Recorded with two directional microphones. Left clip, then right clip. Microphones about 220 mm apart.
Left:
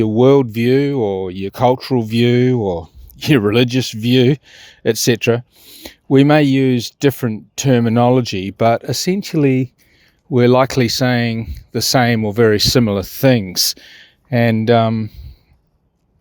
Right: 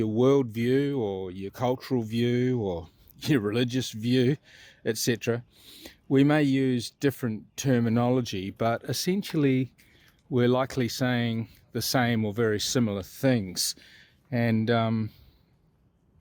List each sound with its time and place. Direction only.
0.0 s speech: 35° left (ahead or behind)